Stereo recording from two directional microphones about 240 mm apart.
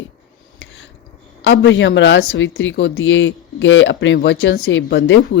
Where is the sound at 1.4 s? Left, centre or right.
Left.